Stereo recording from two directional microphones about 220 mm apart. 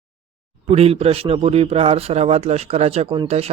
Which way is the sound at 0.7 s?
25° right (ahead or behind).